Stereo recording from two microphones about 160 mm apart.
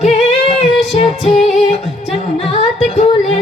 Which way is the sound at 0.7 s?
Centre (ahead or behind).